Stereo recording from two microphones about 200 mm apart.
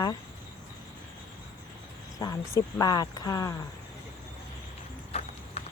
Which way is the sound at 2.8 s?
20° left (ahead or behind).